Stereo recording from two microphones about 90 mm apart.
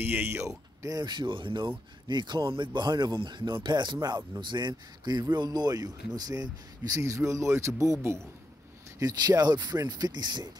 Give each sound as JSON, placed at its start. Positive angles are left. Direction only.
{"t": 0.0, "sound": "speech", "side_deg": -25}
{"t": 0.8, "sound": "speech", "side_deg": -50}
{"t": 9.0, "sound": "speech", "side_deg": -45}